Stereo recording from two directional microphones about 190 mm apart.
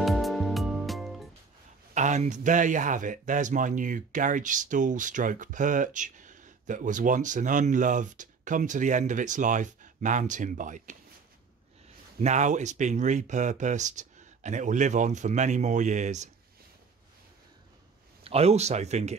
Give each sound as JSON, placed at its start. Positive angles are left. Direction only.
{"t": 0.0, "sound": "music", "side_deg": 0}
{"t": 2.0, "sound": "speech", "side_deg": -40}
{"t": 12.2, "sound": "speech", "side_deg": -40}
{"t": 18.2, "sound": "speech", "side_deg": -30}